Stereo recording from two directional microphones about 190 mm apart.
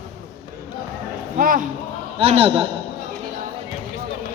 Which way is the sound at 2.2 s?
30° right (ahead or behind).